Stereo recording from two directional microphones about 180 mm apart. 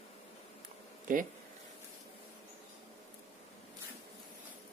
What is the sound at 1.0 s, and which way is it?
Speech, 45° right (ahead or behind).